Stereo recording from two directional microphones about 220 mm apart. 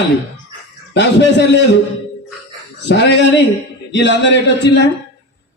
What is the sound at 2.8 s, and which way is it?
A man's voice, 50° left (ahead or behind).